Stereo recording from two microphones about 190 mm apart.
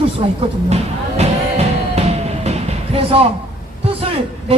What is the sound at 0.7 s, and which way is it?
Music, 35° right (ahead or behind).